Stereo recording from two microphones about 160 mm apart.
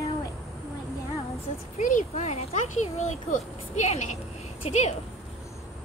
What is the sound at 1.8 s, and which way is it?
Speech, 50° left (ahead or behind).